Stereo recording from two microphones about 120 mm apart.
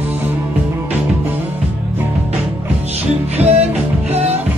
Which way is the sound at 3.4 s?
60° right (ahead or behind).